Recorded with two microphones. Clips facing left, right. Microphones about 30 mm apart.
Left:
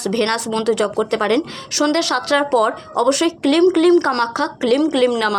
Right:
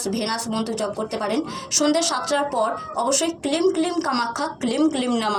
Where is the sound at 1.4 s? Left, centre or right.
Left.